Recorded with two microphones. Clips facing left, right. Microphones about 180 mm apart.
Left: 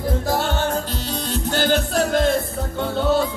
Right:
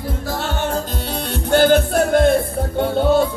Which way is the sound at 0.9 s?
60° right (ahead or behind).